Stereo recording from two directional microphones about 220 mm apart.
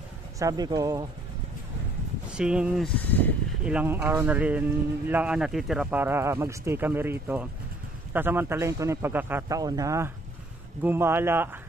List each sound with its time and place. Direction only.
0.4 s speech: 15° right (ahead or behind)
2.3 s speech: 5° right (ahead or behind)
3.6 s speech: 5° right (ahead or behind)